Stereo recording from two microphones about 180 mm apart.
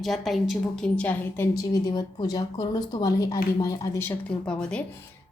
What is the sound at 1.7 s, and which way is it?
Speech, 20° left (ahead or behind).